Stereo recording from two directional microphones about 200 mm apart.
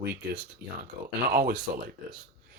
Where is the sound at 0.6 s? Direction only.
10° right (ahead or behind).